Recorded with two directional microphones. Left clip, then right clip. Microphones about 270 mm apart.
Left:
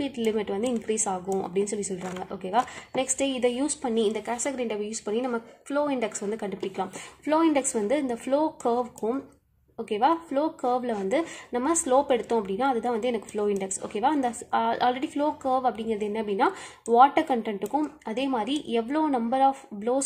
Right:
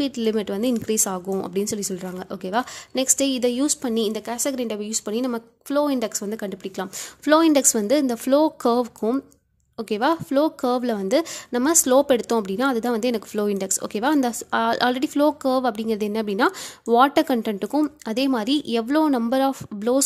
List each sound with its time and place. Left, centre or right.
0.1 s a woman's voice: right
11.7 s a woman's voice: right
12.2 s speech: right
12.4 s a woman's voice: right